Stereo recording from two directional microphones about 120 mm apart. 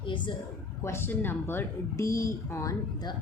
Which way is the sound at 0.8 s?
20° left (ahead or behind).